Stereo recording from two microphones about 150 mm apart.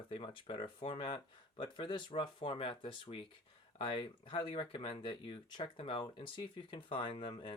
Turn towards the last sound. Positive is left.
turn(degrees=35)  # may be behind; listen again after turning